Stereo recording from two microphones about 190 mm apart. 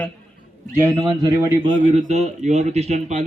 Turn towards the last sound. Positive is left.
turn(degrees=-35)  # may be behind; listen again after turning